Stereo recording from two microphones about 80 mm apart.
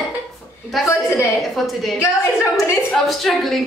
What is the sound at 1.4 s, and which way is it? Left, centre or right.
A woman's voice, centre.